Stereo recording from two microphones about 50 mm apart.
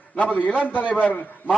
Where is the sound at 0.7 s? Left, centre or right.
Left.